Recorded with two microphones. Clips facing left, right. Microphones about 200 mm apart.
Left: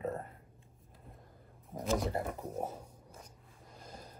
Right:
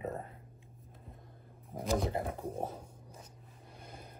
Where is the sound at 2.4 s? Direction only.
10° right (ahead or behind).